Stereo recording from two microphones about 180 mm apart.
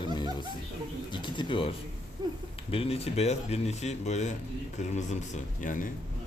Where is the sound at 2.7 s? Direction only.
35° left (ahead or behind).